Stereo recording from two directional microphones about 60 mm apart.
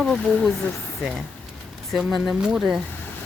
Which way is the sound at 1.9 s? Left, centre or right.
Centre.